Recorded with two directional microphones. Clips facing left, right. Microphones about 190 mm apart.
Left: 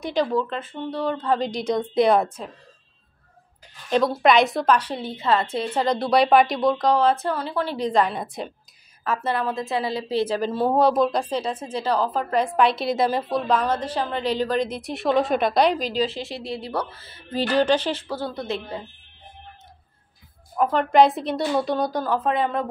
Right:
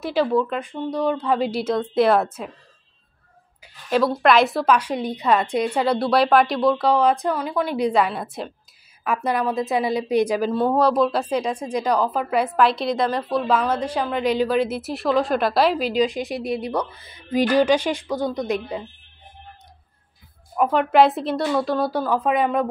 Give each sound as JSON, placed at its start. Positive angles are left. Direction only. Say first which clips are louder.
{"t": 0.0, "sound": "a woman's voice", "louder": "right 3 dB", "side_deg": -5}
{"t": 3.6, "sound": "a sound", "louder": "right 1 dB", "side_deg": -5}
{"t": 4.1, "sound": "a woman's voice", "louder": "right 1 dB", "side_deg": 0}
{"t": 9.0, "sound": "a woman's voice", "louder": "right 2 dB", "side_deg": -15}
{"t": 10.8, "sound": "a woman's voice", "louder": "left 2 dB", "side_deg": 0}
{"t": 13.5, "sound": "a woman's voice", "louder": "right 1 dB", "side_deg": -10}
{"t": 20.5, "sound": "a woman's voice", "louder": "right 1 dB", "side_deg": -10}